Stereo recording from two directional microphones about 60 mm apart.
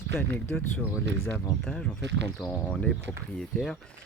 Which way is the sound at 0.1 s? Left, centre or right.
Left.